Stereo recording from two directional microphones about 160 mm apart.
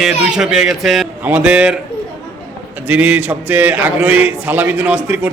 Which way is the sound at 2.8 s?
10° right (ahead or behind).